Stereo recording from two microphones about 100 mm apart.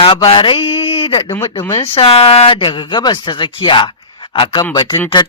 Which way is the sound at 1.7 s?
85° left.